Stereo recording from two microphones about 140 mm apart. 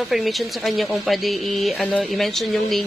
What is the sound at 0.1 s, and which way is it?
A woman's voice, centre (ahead or behind).